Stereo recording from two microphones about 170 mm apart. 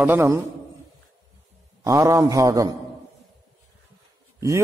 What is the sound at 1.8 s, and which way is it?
Speech, 20° right (ahead or behind).